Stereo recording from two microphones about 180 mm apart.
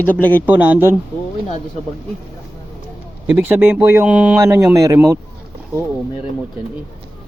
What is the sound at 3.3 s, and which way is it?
Speech, 10° right (ahead or behind).